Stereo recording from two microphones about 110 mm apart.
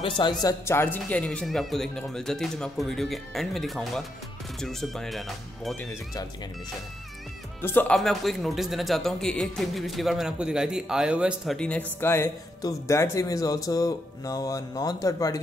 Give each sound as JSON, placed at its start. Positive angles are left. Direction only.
{"t": 0.0, "sound": "speech", "side_deg": 45}
{"t": 0.7, "sound": "a man's voice", "side_deg": 20}
{"t": 7.6, "sound": "speech", "side_deg": 20}
{"t": 7.9, "sound": "a man's voice", "side_deg": 5}
{"t": 11.5, "sound": "speech", "side_deg": 10}
{"t": 12.0, "sound": "speech", "side_deg": 20}